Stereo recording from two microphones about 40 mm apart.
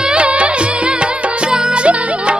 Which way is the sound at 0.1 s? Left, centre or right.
Right.